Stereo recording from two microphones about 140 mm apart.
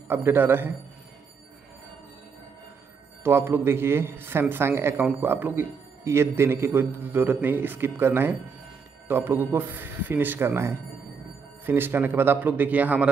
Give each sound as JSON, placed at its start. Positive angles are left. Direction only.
{"t": 0.1, "sound": "a man's voice", "side_deg": -15}
{"t": 3.3, "sound": "a man's voice", "side_deg": -15}